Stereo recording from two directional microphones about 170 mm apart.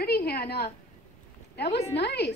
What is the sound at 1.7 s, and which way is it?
Speech, 75° left (ahead or behind).